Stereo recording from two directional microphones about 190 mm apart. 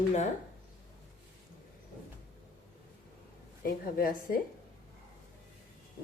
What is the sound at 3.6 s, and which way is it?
Speech, 50° left (ahead or behind).